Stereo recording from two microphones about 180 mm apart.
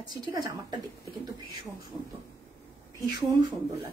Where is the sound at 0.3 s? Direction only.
20° right (ahead or behind).